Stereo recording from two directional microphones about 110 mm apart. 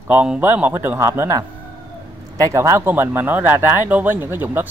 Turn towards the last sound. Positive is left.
turn(degrees=-20)  # may be behind; listen again after turning